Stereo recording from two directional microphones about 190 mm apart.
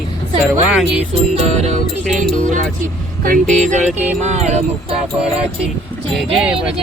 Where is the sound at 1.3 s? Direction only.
35° right (ahead or behind).